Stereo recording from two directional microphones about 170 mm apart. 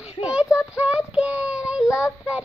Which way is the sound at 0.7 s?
5° right (ahead or behind).